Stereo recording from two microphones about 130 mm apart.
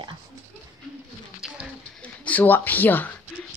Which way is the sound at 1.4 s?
5° right (ahead or behind).